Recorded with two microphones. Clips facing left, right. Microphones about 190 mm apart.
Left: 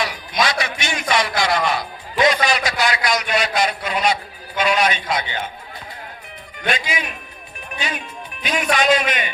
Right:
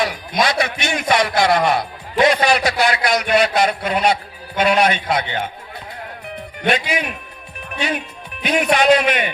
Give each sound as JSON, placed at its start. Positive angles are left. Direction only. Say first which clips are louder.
{"t": 0.0, "sound": "a sound", "louder": "right 3 dB", "side_deg": -55}
{"t": 0.6, "sound": "a man's voice", "louder": "right 4 dB", "side_deg": -55}
{"t": 6.6, "sound": "a man's voice", "louder": "right 4 dB", "side_deg": -60}